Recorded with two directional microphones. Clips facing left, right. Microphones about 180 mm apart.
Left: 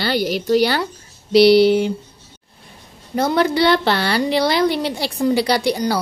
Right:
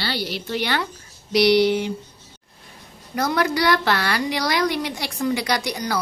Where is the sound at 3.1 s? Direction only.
30° left (ahead or behind).